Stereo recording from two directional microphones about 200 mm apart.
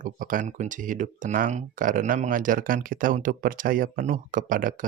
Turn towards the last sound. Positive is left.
turn(degrees=-40)  # may be behind; listen again after turning